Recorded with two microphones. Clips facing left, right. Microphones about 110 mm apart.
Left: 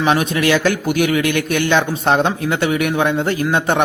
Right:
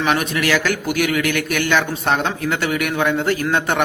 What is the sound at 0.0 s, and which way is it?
A man's voice, 20° left (ahead or behind).